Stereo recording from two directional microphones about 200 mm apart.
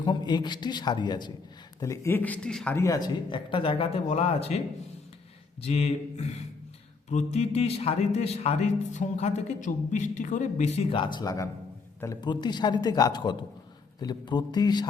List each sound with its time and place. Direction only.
0.0 s speech: 20° left (ahead or behind)
5.6 s speech: 30° left (ahead or behind)